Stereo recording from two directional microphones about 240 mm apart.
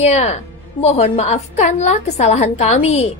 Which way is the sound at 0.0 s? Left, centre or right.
Left.